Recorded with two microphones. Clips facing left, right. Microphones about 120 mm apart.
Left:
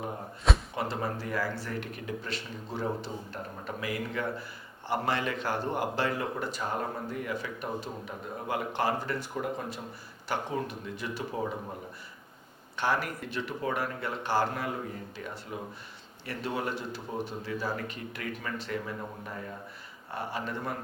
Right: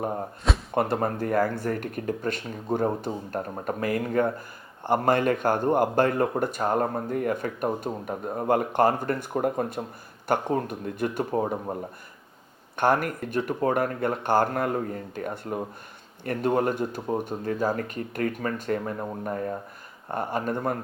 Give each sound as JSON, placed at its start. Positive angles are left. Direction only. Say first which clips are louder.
{"t": 0.7, "sound": "speech", "louder": "right 8 dB", "side_deg": -55}
{"t": 12.7, "sound": "speech", "louder": "right 7 dB", "side_deg": -50}